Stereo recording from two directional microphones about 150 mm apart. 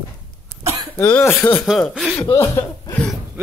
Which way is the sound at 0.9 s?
15° left (ahead or behind).